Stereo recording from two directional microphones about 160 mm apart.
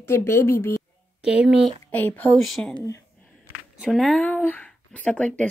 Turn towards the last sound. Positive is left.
turn(degrees=10)  # may be behind; listen again after turning